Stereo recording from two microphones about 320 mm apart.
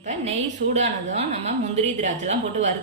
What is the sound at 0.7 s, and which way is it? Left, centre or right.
A woman's voice, right.